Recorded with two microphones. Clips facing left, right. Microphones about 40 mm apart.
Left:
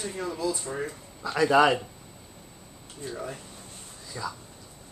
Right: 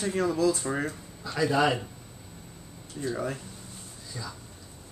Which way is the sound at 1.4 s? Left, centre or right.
Left.